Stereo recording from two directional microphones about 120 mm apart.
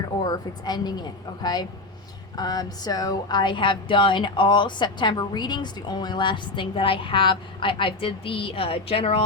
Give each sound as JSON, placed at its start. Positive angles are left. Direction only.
{"t": 0.2, "sound": "a woman's voice", "side_deg": 35}